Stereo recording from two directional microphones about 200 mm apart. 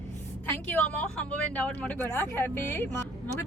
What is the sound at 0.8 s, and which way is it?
Speech, 5° left (ahead or behind).